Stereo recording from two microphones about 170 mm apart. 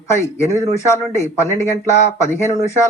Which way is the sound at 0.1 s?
15° left (ahead or behind).